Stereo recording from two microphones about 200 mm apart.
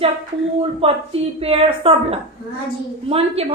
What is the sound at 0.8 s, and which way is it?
A woman's voice, 30° right (ahead or behind).